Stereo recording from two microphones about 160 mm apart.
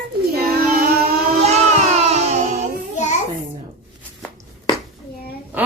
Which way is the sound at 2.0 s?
45° right (ahead or behind).